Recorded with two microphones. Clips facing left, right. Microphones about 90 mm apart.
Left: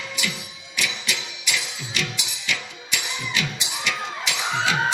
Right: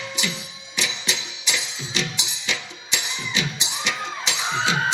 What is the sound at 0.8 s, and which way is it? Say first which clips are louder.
Music: even; 25° right (ahead or behind).